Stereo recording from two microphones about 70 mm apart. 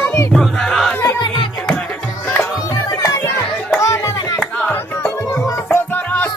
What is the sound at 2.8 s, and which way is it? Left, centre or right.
Music, left.